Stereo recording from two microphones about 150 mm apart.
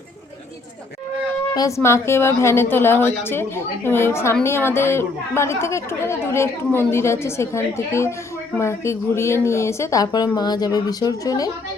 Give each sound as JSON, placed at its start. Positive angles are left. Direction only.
{"t": 1.5, "sound": "a woman's voice", "side_deg": 20}